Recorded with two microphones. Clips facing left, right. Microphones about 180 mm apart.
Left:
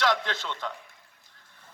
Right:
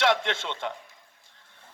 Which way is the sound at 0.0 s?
25° right (ahead or behind).